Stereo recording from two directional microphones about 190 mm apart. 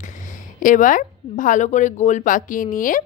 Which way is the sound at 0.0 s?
40° left (ahead or behind).